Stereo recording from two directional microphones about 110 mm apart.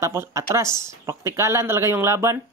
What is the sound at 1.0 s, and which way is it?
Speech, 25° right (ahead or behind).